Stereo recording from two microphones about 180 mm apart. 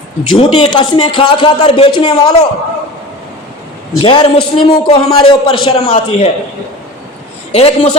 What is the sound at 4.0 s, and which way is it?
Speech, 30° left (ahead or behind).